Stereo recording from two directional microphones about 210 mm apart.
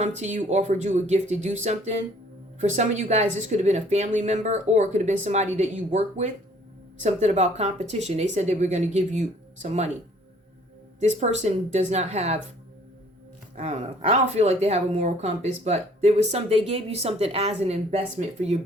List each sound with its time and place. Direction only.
0.0 s speech: 35° right (ahead or behind)
11.0 s speech: 35° right (ahead or behind)
13.6 s speech: 30° right (ahead or behind)